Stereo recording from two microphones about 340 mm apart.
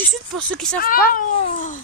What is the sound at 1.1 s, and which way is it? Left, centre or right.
Cat, left.